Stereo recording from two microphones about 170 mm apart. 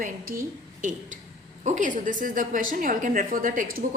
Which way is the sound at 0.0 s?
55° right (ahead or behind).